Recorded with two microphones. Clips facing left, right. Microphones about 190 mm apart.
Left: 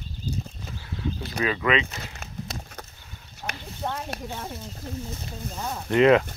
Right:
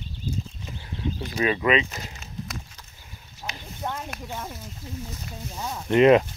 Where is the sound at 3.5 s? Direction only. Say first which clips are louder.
Left 2 dB; 65° left (ahead or behind).